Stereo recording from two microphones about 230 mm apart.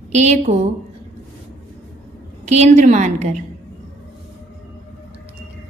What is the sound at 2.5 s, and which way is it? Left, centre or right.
Speech, right.